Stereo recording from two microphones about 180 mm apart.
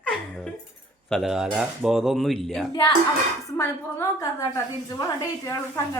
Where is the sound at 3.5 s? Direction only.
15° left (ahead or behind).